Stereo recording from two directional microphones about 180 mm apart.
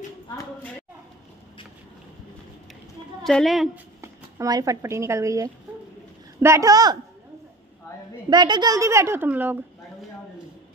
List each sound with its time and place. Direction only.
3.3 s a woman's voice: centre (ahead or behind)
4.0 s speech: 20° right (ahead or behind)
8.3 s a woman's voice: 25° right (ahead or behind)